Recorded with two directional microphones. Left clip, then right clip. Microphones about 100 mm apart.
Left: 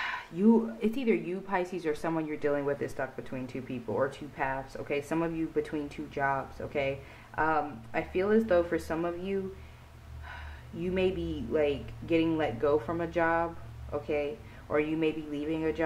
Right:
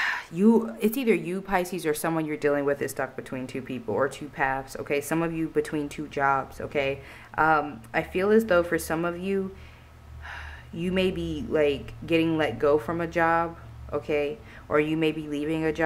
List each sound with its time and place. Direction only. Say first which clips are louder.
0.0 s a woman's voice: right 5 dB; 35° right (ahead or behind)